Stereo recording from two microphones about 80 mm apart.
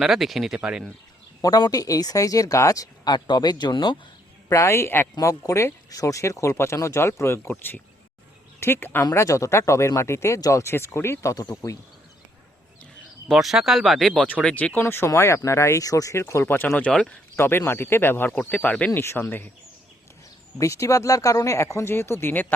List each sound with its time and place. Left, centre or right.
0.0 s speech: centre
1.4 s speech: left
4.4 s speech: left
7.5 s speech: left
9.1 s speech: left
13.3 s speech: centre
14.3 s speech: centre
14.8 s speech: left
16.2 s speech: left
16.9 s speech: centre
17.3 s speech: left
18.9 s speech: left
20.6 s speech: left